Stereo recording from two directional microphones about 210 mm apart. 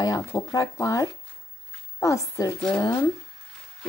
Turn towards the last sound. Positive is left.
turn(degrees=20)  # may be behind; listen again after turning